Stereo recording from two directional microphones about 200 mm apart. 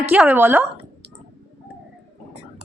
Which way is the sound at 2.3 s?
30° right (ahead or behind).